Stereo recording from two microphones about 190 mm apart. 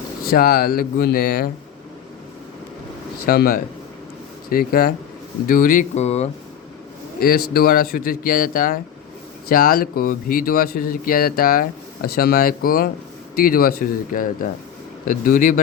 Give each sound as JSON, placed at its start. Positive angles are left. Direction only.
{"t": 0.3, "sound": "speech", "side_deg": 50}
{"t": 3.2, "sound": "speech", "side_deg": 55}
{"t": 7.2, "sound": "speech", "side_deg": 50}